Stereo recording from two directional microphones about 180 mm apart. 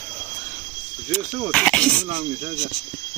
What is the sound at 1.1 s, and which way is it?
Speech, 5° left (ahead or behind).